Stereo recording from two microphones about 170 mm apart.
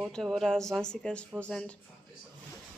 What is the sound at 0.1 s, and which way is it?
Speech, centre (ahead or behind).